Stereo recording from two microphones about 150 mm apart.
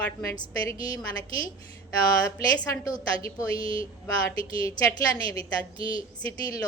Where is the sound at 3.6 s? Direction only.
35° right (ahead or behind).